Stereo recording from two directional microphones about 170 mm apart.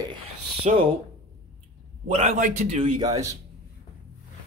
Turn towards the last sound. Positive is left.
turn(degrees=-20)  # may be behind; listen again after turning